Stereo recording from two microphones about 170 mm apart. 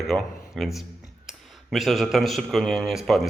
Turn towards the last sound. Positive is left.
turn(degrees=0)  # may be behind; listen again after turning